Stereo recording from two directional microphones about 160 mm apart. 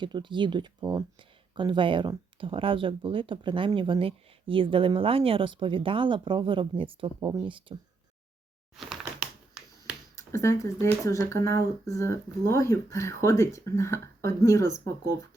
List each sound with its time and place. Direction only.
0.0 s speech: 30° right (ahead or behind)
10.2 s speech: 20° left (ahead or behind)